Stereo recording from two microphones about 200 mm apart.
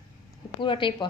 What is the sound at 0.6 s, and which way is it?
Speech, 25° left (ahead or behind).